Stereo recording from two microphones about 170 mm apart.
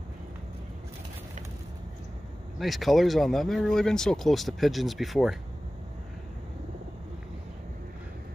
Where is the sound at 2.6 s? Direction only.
Centre (ahead or behind).